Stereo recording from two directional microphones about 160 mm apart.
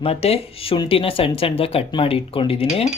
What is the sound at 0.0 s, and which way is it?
Speech, 40° left (ahead or behind).